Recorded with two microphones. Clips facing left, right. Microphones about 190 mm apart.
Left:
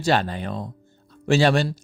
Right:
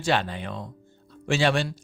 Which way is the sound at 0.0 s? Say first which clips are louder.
Left 4 dB; 40° left (ahead or behind).